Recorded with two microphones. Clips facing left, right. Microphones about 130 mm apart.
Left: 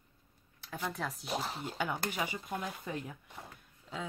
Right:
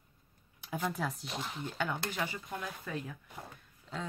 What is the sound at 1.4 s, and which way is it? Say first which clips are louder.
Speech: left 1 dB; 35° left (ahead or behind).